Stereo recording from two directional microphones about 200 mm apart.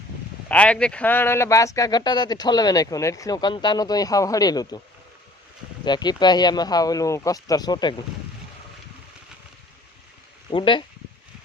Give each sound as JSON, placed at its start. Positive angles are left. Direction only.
{"t": 0.4, "sound": "speech", "side_deg": 5}
{"t": 5.8, "sound": "speech", "side_deg": 20}
{"t": 10.5, "sound": "speech", "side_deg": 25}